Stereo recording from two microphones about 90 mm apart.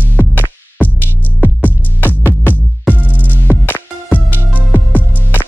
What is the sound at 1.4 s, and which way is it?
Music, 20° left (ahead or behind).